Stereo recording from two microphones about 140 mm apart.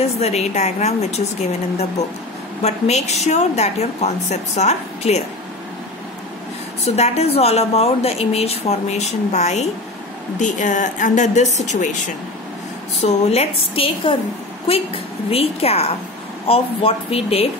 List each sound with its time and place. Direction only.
0.2 s a woman's voice: 50° left (ahead or behind)
2.6 s a woman's voice: 50° left (ahead or behind)
6.8 s a woman's voice: 50° left (ahead or behind)
13.0 s a woman's voice: 50° left (ahead or behind)